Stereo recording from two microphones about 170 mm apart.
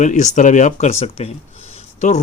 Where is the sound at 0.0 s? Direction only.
45° left (ahead or behind).